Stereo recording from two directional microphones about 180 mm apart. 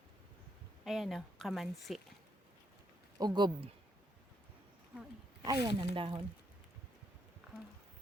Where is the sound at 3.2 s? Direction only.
25° right (ahead or behind).